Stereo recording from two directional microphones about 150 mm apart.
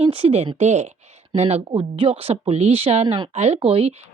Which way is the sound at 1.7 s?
35° right (ahead or behind).